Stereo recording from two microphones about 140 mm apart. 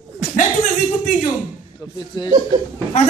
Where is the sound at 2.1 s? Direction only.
30° left (ahead or behind).